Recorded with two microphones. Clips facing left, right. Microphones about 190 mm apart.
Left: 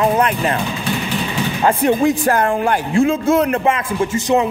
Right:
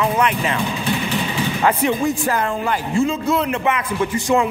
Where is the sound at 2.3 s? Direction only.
50° left (ahead or behind).